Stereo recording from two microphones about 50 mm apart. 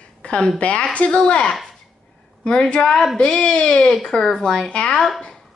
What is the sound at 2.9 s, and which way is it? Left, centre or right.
Speech, centre.